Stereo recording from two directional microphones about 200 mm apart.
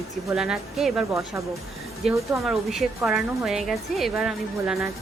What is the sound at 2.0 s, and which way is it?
Speech, 30° right (ahead or behind).